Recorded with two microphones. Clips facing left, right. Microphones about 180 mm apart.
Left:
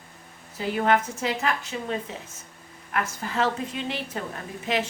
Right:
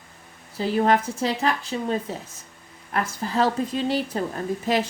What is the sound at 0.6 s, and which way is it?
A woman's voice, 35° right (ahead or behind).